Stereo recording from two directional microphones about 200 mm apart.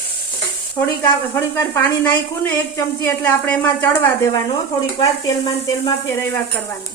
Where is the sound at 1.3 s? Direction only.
15° left (ahead or behind).